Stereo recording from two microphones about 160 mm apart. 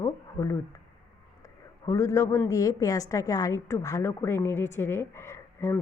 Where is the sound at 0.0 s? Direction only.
20° left (ahead or behind).